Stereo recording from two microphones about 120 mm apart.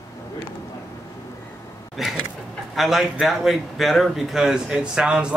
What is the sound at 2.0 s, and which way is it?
A man's voice, centre (ahead or behind).